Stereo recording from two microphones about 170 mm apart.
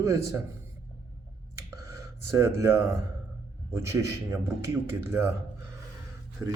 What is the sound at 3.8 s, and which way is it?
A man's voice, 15° right (ahead or behind).